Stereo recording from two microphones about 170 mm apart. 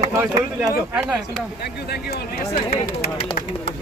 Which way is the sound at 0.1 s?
15° right (ahead or behind).